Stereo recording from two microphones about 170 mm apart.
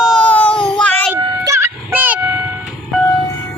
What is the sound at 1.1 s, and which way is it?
Music, 15° right (ahead or behind).